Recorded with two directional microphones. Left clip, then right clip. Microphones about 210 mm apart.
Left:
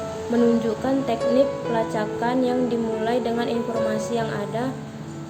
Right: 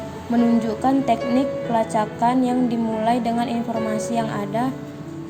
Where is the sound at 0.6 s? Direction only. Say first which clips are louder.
Right 3 dB; 30° right (ahead or behind).